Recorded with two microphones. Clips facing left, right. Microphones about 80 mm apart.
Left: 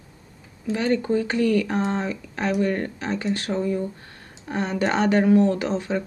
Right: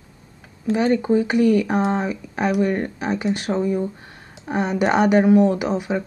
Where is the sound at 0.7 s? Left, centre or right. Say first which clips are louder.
Right 4 dB; centre.